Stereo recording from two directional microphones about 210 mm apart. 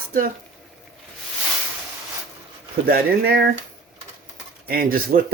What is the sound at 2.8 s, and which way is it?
Speech, 45° right (ahead or behind).